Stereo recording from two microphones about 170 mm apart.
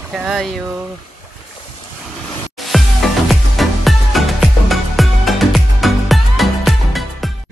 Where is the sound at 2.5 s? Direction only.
Centre (ahead or behind).